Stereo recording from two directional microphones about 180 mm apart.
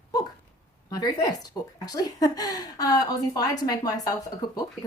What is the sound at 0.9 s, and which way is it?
Speech, 20° left (ahead or behind).